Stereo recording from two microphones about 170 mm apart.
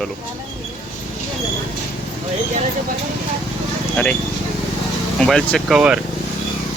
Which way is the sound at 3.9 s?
10° left (ahead or behind).